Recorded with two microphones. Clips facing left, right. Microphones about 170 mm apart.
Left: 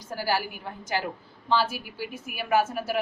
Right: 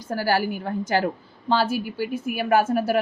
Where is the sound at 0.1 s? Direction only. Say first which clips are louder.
Right 6 dB; 55° right (ahead or behind).